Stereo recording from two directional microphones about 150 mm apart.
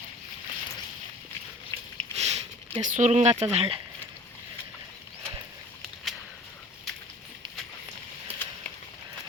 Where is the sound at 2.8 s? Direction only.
55° right (ahead or behind).